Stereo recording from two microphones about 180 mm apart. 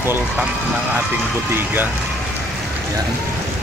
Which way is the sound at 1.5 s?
10° right (ahead or behind).